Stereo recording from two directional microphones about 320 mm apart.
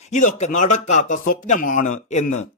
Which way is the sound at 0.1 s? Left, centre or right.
Left.